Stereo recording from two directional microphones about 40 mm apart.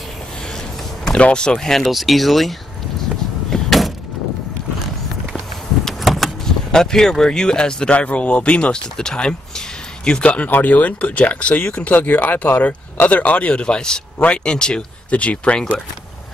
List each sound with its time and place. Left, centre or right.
1.0 s speech: left
1.9 s speech: centre
3.4 s door: centre
6.0 s vehicle: centre
6.7 s speech: centre
7.9 s speech: left
8.7 s speech: centre
10.5 s speech: left
11.9 s speech: left
13.2 s speech: left
15.0 s speech: left